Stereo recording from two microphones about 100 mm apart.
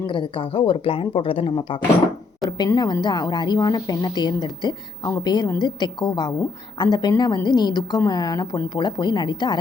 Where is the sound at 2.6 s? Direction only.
40° left (ahead or behind).